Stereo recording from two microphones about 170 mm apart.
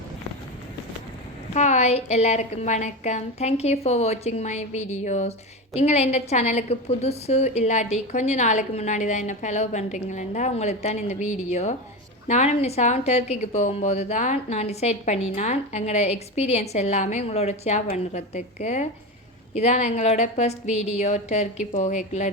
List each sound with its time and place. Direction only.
1.5 s a woman's voice: 40° left (ahead or behind)